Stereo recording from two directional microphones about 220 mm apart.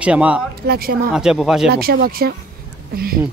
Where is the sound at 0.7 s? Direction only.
45° right (ahead or behind).